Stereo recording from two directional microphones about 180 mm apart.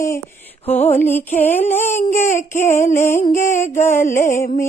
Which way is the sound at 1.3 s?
40° left (ahead or behind).